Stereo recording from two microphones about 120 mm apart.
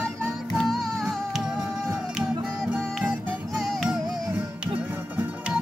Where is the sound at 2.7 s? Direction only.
Centre (ahead or behind).